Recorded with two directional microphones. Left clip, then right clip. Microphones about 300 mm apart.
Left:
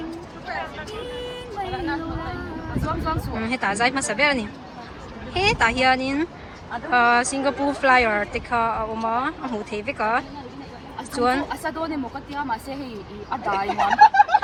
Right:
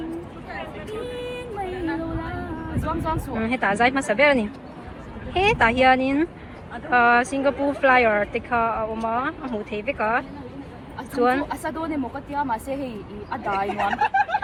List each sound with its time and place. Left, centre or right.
3.1 s speech: centre
13.7 s speech: left